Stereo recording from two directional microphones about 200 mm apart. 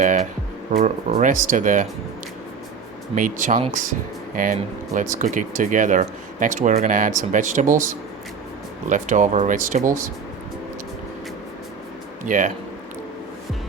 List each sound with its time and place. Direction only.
0.7 s speech: 35° right (ahead or behind)
3.2 s speech: 40° right (ahead or behind)
8.9 s speech: 40° right (ahead or behind)
12.2 s speech: 40° right (ahead or behind)